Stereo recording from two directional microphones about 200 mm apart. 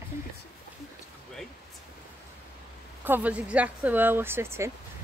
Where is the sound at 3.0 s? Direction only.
10° right (ahead or behind).